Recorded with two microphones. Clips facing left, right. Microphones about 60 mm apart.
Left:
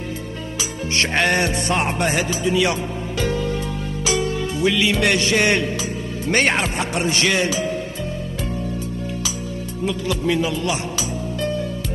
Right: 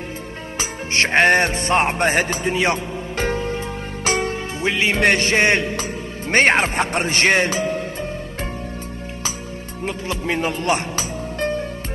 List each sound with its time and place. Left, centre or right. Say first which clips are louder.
0.6 s music: right 2 dB; right
9.8 s speech: left 3 dB; right